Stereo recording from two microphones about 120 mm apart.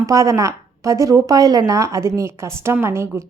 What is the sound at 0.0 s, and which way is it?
Speech, 25° right (ahead or behind).